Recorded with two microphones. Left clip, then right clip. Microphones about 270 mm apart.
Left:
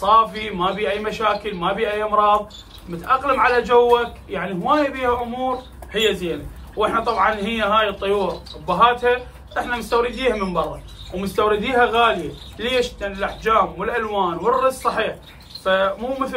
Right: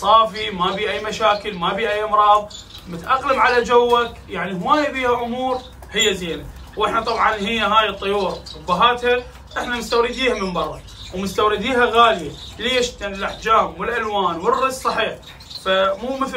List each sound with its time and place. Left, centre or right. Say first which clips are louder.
0.0 s a man's voice: right 1 dB; centre